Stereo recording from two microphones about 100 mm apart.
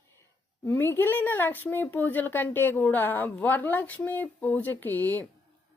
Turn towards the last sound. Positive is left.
turn(degrees=20)  # may be behind; listen again after turning